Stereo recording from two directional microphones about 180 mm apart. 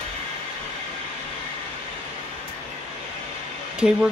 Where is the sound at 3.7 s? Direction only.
5° right (ahead or behind).